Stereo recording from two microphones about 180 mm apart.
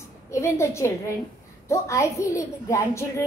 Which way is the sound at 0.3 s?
15° left (ahead or behind).